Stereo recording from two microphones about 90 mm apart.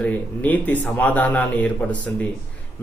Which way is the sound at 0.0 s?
15° left (ahead or behind).